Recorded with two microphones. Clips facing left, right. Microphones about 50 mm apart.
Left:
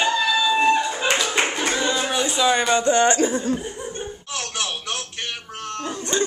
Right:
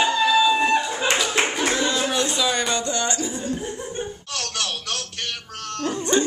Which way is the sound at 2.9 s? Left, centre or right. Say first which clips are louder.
Left 8 dB; left.